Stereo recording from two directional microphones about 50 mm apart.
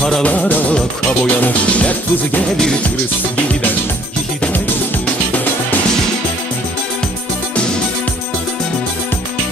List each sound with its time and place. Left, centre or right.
0.2 s music: left
1.2 s speech: left